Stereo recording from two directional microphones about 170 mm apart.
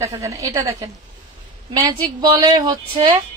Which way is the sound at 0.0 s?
20° right (ahead or behind).